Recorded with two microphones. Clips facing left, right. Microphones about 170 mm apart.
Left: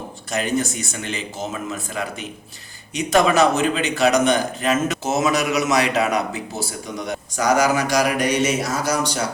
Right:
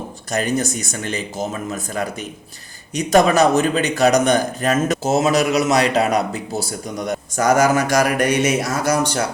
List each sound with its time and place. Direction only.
0.3 s a man's voice: 40° right (ahead or behind); by 9.2 s 60° right (ahead or behind)